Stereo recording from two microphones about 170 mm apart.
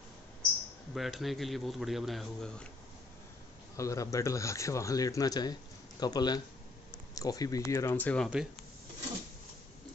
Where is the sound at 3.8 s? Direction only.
20° left (ahead or behind).